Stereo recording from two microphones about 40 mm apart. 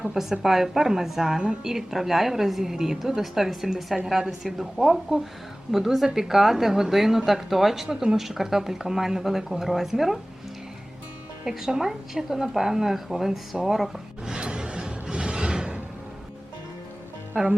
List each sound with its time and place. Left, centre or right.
0.1 s a woman's voice: centre
1.4 s a woman's voice: right
1.7 s a woman's voice: centre
11.4 s a woman's voice: centre
14.3 s music: right
17.4 s a woman's voice: centre